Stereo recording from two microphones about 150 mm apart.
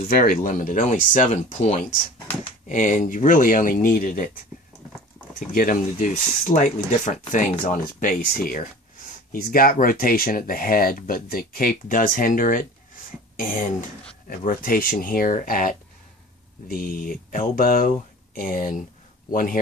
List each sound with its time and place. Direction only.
0.1 s speech: 70° left (ahead or behind)
5.5 s speech: 65° left (ahead or behind)